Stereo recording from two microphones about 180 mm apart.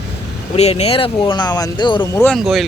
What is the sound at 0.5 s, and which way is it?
Speech, 35° left (ahead or behind).